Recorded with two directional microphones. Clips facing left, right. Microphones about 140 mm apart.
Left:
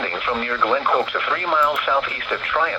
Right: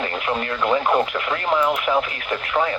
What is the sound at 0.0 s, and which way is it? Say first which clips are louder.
Speech: even; 20° right (ahead or behind).